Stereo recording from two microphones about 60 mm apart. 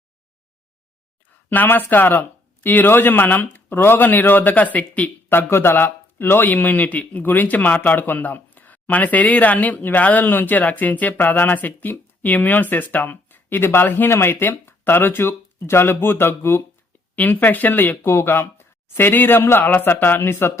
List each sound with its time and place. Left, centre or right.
1.5 s speech: left
5.3 s speech: left